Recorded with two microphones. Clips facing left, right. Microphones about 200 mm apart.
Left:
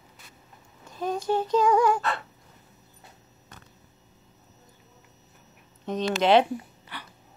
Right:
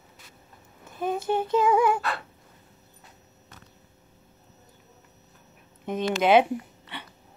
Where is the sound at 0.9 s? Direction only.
55° right (ahead or behind).